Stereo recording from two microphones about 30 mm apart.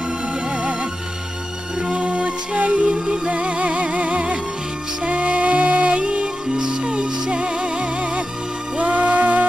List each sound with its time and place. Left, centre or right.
2.0 s music: right
5.9 s music: right
6.5 s music: right
8.7 s music: right